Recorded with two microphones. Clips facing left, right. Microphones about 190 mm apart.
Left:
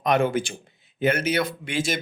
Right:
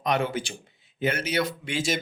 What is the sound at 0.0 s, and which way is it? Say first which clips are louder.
A man's voice: left 5 dB; 55° left (ahead or behind).